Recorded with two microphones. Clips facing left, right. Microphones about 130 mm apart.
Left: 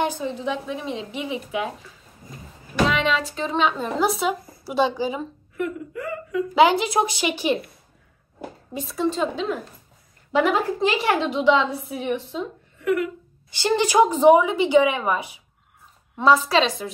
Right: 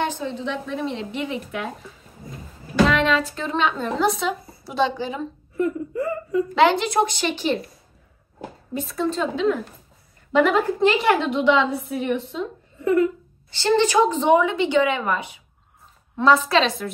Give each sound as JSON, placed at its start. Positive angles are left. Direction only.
{"t": 0.0, "sound": "a woman's voice", "side_deg": 10}
{"t": 2.9, "sound": "a woman's voice", "side_deg": 0}
{"t": 5.6, "sound": "whimper", "side_deg": -30}
{"t": 6.5, "sound": "a woman's voice", "side_deg": 10}
{"t": 8.7, "sound": "a woman's voice", "side_deg": 0}
{"t": 12.7, "sound": "a sound", "side_deg": -30}
{"t": 13.5, "sound": "a woman's voice", "side_deg": 15}